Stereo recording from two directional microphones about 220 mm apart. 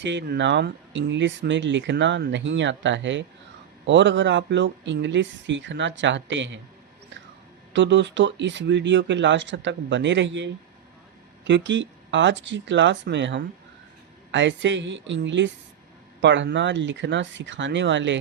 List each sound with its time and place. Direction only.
0.0 s speech: 55° right (ahead or behind)
7.7 s speech: 55° right (ahead or behind)